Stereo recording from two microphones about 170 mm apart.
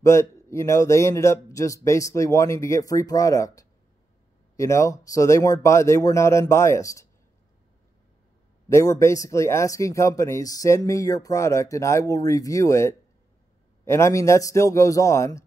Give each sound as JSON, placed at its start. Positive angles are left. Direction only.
{"t": 0.0, "sound": "speech", "side_deg": 15}
{"t": 8.6, "sound": "speech", "side_deg": 15}